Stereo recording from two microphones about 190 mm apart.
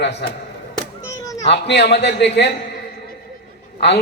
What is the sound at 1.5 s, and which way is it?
A man's voice, 65° left (ahead or behind).